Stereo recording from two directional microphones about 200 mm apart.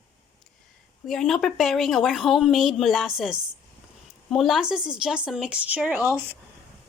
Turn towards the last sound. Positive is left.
turn(degrees=-10)  # may be behind; listen again after turning